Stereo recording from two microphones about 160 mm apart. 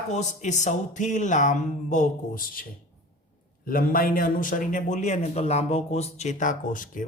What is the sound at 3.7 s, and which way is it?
A man's voice, 60° left (ahead or behind).